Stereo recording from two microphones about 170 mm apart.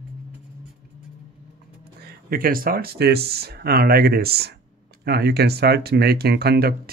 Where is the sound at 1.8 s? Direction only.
65° right (ahead or behind).